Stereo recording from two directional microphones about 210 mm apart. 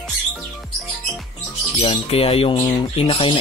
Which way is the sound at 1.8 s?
30° left (ahead or behind).